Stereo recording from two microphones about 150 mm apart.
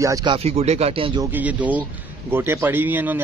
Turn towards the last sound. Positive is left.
turn(degrees=-10)  # may be behind; listen again after turning